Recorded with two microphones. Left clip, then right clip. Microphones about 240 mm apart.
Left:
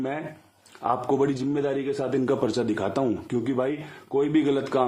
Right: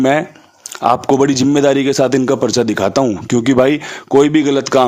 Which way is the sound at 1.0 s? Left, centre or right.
Right.